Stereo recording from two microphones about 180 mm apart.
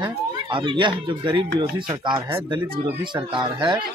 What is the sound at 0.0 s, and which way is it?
Speech, 25° right (ahead or behind).